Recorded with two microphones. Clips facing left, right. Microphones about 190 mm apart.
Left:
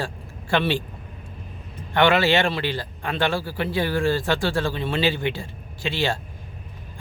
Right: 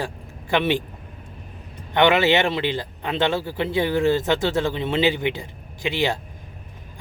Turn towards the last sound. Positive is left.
turn(degrees=-15)  # may be behind; listen again after turning